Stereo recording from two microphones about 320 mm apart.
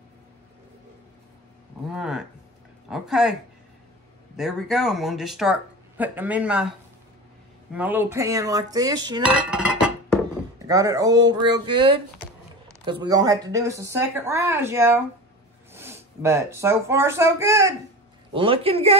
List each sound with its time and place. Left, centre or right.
1.9 s speech: centre
4.4 s speech: centre
7.7 s dishes: centre
10.7 s speech: centre